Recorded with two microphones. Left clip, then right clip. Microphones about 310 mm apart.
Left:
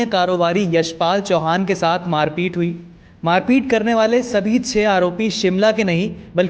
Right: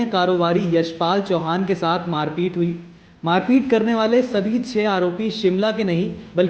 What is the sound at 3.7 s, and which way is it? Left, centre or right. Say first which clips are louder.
A man's voice: left 2 dB; left.